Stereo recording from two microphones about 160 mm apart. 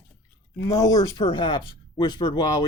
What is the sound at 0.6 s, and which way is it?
Speech, 25° left (ahead or behind).